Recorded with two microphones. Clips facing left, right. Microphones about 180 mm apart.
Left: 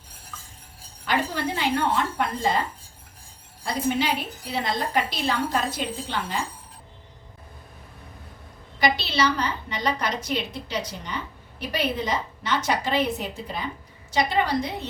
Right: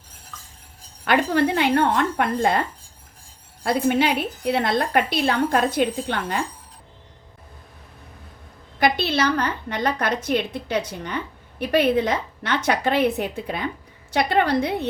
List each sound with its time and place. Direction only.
1.0 s a woman's voice: 60° right (ahead or behind)
8.8 s a woman's voice: 55° right (ahead or behind)